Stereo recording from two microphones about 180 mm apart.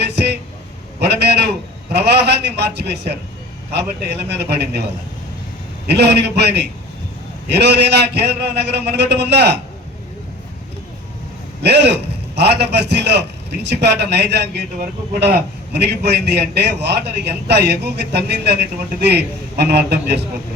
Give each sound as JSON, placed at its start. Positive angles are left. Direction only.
{"t": 0.0, "sound": "a sound", "side_deg": -70}
{"t": 0.9, "sound": "a man's voice", "side_deg": -65}
{"t": 5.9, "sound": "a man's voice", "side_deg": -70}
{"t": 11.6, "sound": "a man's voice", "side_deg": -65}